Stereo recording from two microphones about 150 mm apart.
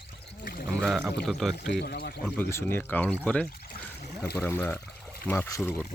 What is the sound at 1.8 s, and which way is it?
Speech, 90° left.